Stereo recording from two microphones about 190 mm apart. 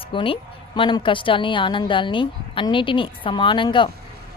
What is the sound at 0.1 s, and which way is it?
A woman's voice, 25° left (ahead or behind).